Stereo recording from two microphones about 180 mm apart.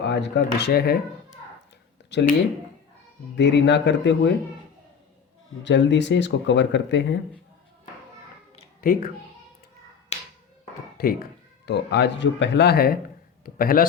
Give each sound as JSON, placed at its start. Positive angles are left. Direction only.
{"t": 0.0, "sound": "speech", "side_deg": 70}
{"t": 2.1, "sound": "speech", "side_deg": 75}
{"t": 3.3, "sound": "speech", "side_deg": 75}
{"t": 5.6, "sound": "speech", "side_deg": 80}
{"t": 8.8, "sound": "speech", "side_deg": 55}
{"t": 10.1, "sound": "tap", "side_deg": 35}
{"t": 10.9, "sound": "a man's voice", "side_deg": 55}